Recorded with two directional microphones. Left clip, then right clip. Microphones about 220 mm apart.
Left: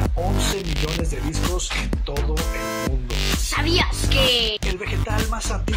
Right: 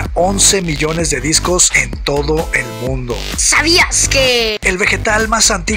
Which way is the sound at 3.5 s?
25° right (ahead or behind).